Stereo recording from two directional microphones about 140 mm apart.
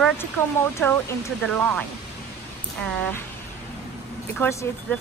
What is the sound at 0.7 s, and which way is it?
Speech, 15° left (ahead or behind).